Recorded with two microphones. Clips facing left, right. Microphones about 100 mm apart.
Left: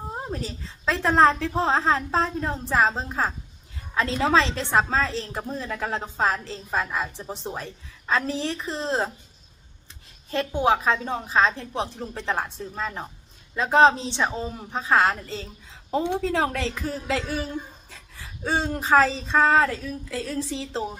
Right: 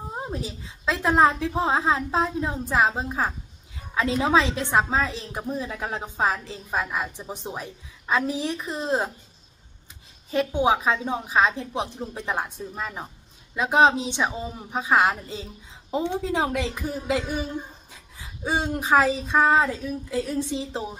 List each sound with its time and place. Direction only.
0.3 s a woman's voice: 15° right (ahead or behind)
10.3 s a woman's voice: 15° right (ahead or behind)